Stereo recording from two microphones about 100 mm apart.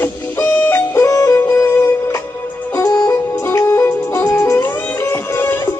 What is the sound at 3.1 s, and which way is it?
Music, 30° left (ahead or behind).